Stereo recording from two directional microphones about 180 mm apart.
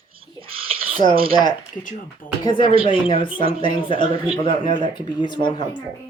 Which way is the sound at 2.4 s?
25° left (ahead or behind).